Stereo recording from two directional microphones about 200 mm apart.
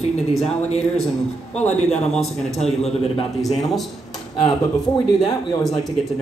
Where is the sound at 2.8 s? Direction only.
30° left (ahead or behind).